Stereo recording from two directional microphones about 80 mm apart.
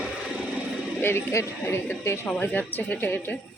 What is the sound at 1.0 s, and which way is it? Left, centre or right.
Speech, left.